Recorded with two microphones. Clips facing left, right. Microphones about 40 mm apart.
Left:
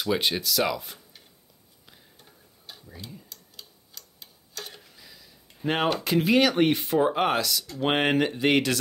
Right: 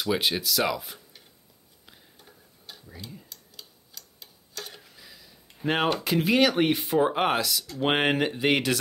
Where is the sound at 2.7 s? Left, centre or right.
Centre.